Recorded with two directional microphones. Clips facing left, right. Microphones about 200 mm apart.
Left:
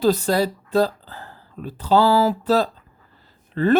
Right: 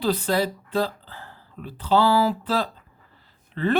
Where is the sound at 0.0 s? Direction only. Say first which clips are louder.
Left 4 dB; 40° left (ahead or behind).